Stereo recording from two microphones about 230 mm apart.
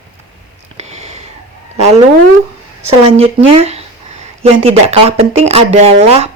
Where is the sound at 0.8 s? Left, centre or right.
Right.